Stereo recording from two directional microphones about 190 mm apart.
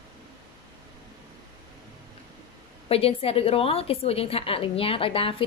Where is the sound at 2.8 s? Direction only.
30° left (ahead or behind).